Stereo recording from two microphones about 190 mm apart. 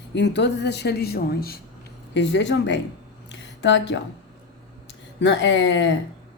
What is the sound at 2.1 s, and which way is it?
Speech, 70° left (ahead or behind).